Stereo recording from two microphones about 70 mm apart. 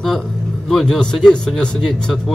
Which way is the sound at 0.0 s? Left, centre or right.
Centre.